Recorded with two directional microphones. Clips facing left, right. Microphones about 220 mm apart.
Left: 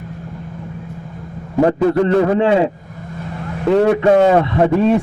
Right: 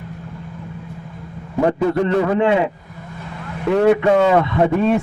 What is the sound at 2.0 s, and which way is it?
Speech, 35° left (ahead or behind).